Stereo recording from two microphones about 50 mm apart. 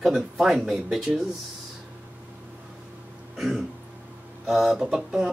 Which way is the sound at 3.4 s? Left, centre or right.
Centre.